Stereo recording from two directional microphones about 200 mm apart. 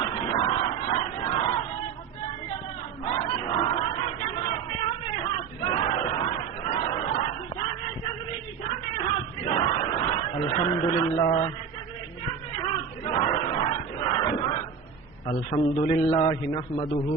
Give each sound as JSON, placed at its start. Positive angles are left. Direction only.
{"t": 0.0, "sound": "music", "side_deg": 25}
{"t": 3.0, "sound": "a sound", "side_deg": 25}
{"t": 5.1, "sound": "battle cry", "side_deg": 25}
{"t": 9.5, "sound": "a sound", "side_deg": 25}
{"t": 12.6, "sound": "battle cry", "side_deg": 25}
{"t": 15.3, "sound": "a man's voice", "side_deg": 25}